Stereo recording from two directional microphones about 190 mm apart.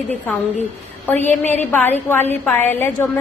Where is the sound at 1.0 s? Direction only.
10° left (ahead or behind).